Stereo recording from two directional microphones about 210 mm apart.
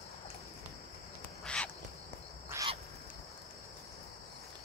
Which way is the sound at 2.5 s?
10° right (ahead or behind).